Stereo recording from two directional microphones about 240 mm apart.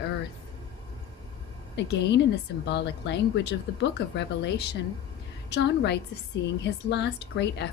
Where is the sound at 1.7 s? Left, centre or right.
Left.